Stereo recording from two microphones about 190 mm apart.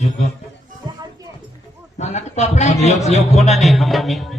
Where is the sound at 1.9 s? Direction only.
35° left (ahead or behind).